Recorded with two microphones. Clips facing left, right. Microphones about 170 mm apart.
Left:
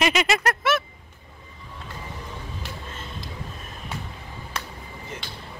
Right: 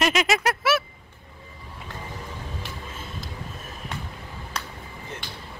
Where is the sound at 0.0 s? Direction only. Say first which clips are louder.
Even; centre (ahead or behind).